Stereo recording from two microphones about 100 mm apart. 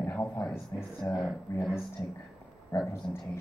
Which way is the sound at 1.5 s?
25° left (ahead or behind).